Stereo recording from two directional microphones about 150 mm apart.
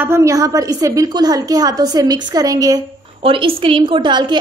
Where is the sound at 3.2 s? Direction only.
35° right (ahead or behind).